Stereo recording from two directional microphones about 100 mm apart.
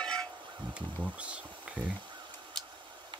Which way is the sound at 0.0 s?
10° left (ahead or behind).